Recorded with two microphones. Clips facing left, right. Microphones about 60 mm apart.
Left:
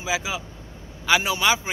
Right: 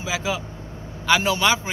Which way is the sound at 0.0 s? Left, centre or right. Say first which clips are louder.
Right 1 dB; centre.